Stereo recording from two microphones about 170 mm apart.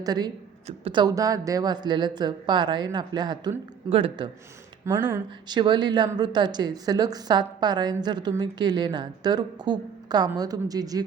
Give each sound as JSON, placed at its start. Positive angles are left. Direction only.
{"t": 0.0, "sound": "a woman's voice", "side_deg": -25}
{"t": 4.9, "sound": "speech", "side_deg": -10}
{"t": 5.5, "sound": "a woman's voice", "side_deg": -25}